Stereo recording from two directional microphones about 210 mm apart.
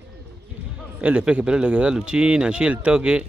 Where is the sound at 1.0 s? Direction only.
5° right (ahead or behind).